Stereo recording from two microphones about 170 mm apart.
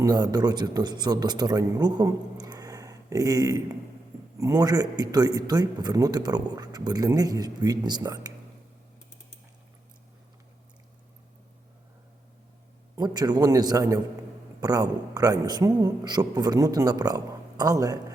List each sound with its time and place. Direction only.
0.0 s a man's voice: 25° right (ahead or behind)
13.0 s a man's voice: 25° right (ahead or behind)